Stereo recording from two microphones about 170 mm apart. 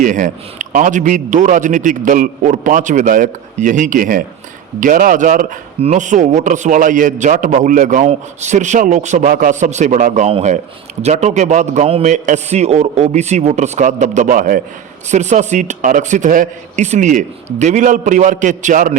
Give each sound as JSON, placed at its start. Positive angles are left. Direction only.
{"t": 0.0, "sound": "a man's voice", "side_deg": -50}